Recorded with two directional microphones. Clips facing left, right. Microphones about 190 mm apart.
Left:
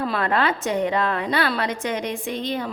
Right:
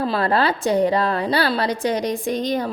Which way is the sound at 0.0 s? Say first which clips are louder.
Right 3 dB; 30° right (ahead or behind).